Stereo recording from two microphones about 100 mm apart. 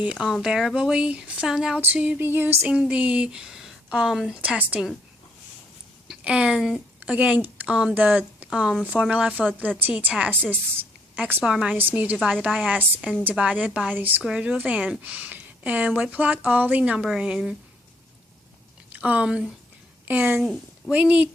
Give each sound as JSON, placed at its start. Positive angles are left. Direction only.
{"t": 0.0, "sound": "a woman's voice", "side_deg": -10}
{"t": 1.8, "sound": "a sound", "side_deg": -15}
{"t": 2.6, "sound": "a woman's voice", "side_deg": -10}
{"t": 6.1, "sound": "a woman's voice", "side_deg": -10}
{"t": 18.9, "sound": "a woman's voice", "side_deg": -15}